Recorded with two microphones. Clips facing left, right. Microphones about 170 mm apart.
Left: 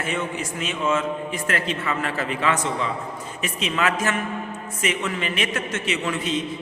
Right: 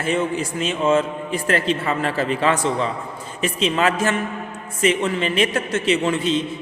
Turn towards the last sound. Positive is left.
turn(degrees=-30)  # may be behind; listen again after turning